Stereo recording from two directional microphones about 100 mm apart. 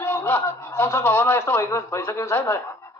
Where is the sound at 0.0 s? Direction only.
25° left (ahead or behind).